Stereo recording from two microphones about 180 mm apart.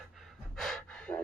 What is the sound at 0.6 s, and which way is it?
Gasp, 5° left (ahead or behind).